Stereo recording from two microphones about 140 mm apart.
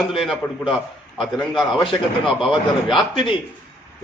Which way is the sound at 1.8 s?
35° left (ahead or behind).